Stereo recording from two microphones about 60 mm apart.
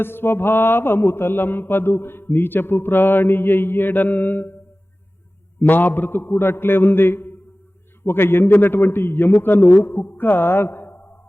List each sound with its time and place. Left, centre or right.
0.0 s mantra: left
5.5 s mantra: left
10.0 s music: left